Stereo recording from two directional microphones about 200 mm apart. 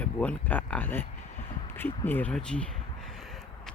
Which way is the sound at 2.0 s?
10° left (ahead or behind).